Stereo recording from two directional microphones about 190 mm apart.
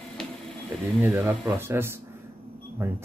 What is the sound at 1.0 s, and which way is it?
Speech, 10° right (ahead or behind).